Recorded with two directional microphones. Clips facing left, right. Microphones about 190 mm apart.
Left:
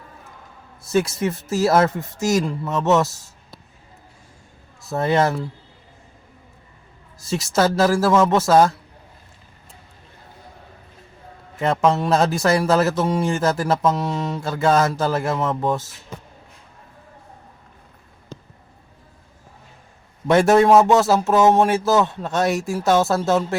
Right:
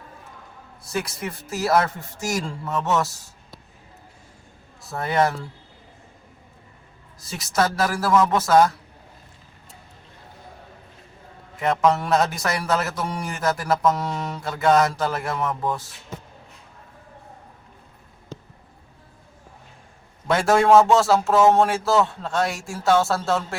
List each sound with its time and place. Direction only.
0.9 s speech: 25° left (ahead or behind)
4.9 s speech: 25° left (ahead or behind)
7.2 s speech: 25° left (ahead or behind)
11.8 s speech: 25° left (ahead or behind)
20.2 s speech: 20° left (ahead or behind)